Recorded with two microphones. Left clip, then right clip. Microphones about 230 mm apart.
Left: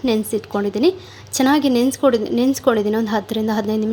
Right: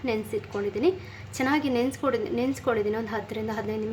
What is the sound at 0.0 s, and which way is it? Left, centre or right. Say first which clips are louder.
A woman's voice: left 9 dB; left.